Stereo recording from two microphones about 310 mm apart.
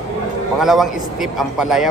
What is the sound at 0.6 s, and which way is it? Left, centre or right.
A man's voice, centre.